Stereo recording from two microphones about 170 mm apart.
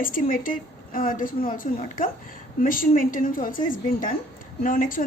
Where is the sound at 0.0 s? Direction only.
55° left (ahead or behind).